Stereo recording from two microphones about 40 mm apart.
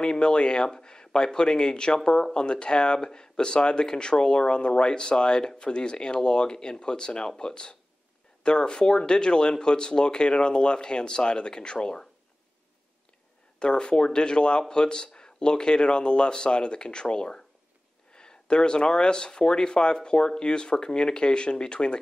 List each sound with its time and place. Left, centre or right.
0.0 s speech: left
13.6 s speech: left